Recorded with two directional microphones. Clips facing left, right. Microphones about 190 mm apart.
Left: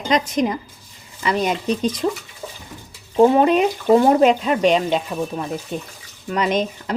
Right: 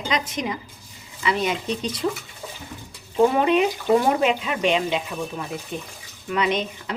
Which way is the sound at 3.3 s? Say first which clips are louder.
Left 4 dB; 40° left (ahead or behind).